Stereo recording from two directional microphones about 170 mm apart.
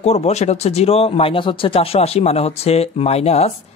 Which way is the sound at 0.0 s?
40° left (ahead or behind).